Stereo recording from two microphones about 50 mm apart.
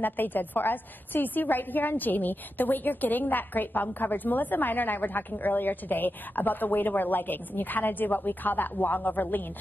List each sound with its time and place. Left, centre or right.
0.0 s a woman's voice: left